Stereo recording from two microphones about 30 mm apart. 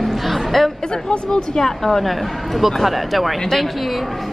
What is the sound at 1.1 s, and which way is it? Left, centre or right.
Speech, left.